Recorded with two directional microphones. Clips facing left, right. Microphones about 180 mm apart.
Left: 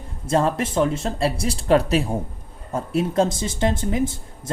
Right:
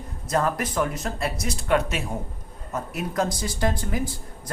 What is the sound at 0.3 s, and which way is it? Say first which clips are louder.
Speech: left 4 dB; 25° left (ahead or behind).